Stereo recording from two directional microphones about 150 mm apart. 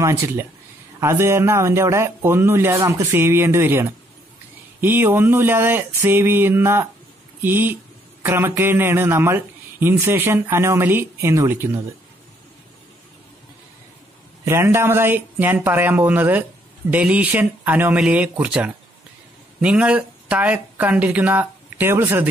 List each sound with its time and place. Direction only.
0.0 s speech: 15° right (ahead or behind)
14.4 s speech: 15° right (ahead or behind)